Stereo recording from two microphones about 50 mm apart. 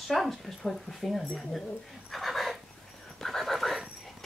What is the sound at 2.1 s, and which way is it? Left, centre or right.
Dog, centre.